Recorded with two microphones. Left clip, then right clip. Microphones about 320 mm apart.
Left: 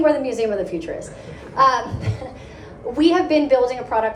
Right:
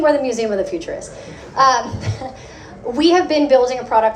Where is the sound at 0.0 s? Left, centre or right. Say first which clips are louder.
Right 2 dB; right.